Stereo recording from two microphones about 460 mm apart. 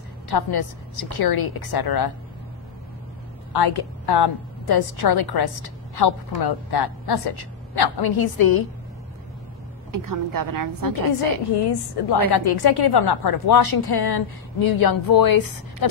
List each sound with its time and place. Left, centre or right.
0.3 s a woman's voice: left
3.5 s a woman's voice: left
9.9 s a woman's voice: right
11.5 s a woman's voice: left